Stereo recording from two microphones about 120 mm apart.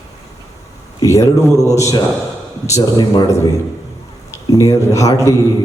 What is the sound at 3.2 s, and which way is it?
A man's voice, 30° left (ahead or behind).